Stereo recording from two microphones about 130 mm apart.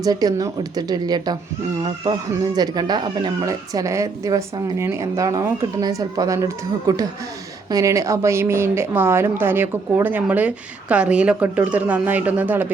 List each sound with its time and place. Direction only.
0.0 s a woman's voice: 30° right (ahead or behind); by 12.7 s 15° right (ahead or behind)